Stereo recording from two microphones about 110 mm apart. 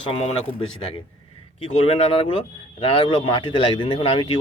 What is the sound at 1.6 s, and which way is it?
Speech, 65° left (ahead or behind).